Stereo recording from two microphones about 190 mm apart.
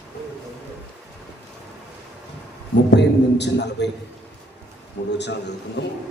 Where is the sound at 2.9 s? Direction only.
65° left (ahead or behind).